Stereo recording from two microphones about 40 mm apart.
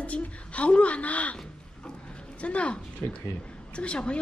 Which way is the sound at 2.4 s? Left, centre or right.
Left.